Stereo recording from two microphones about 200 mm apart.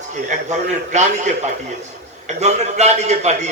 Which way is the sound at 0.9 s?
35° right (ahead or behind).